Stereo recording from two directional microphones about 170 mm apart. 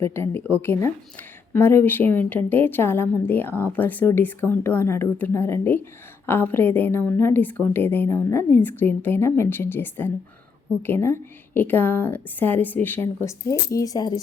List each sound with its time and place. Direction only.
0.0 s a woman's voice: 15° left (ahead or behind)